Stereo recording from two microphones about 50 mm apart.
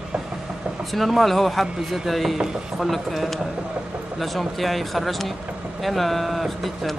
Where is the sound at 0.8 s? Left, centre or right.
Centre.